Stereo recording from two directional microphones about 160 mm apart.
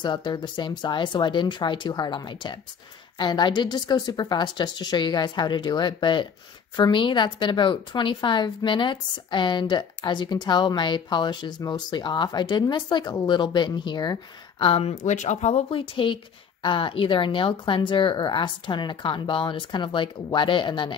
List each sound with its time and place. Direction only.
0.0 s a woman's voice: 30° left (ahead or behind)